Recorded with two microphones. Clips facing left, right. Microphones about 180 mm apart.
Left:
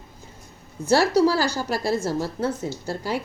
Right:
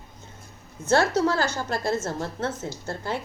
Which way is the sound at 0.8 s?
35° left (ahead or behind).